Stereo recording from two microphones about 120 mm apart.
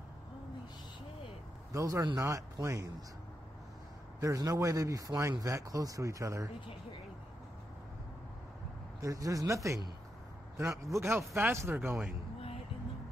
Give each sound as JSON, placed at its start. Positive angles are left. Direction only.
{"t": 1.7, "sound": "speech", "side_deg": -30}
{"t": 4.2, "sound": "speech", "side_deg": -30}
{"t": 9.0, "sound": "speech", "side_deg": -25}